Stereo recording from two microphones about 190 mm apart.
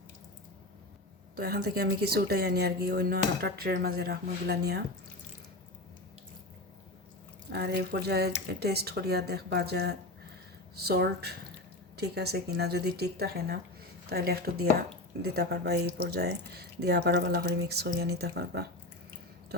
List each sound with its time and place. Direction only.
1.4 s a woman's voice: 55° right (ahead or behind)
7.5 s a woman's voice: 60° right (ahead or behind)